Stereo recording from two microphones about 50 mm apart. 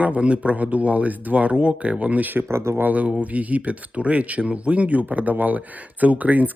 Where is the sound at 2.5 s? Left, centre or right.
Right.